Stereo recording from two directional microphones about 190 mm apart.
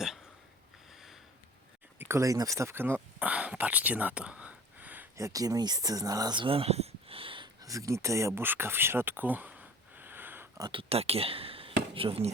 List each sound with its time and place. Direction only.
0.9 s sniff: centre (ahead or behind)
2.0 s speech: 15° right (ahead or behind)
10.7 s speech: 30° right (ahead or behind)